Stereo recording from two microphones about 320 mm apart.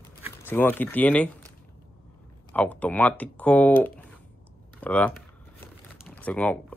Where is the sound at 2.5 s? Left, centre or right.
Centre.